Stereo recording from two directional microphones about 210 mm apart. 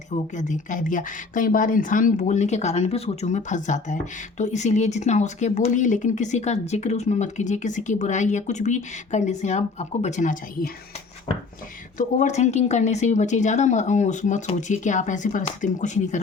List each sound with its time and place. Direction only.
0.1 s speech: 35° left (ahead or behind)
11.9 s speech: 35° left (ahead or behind)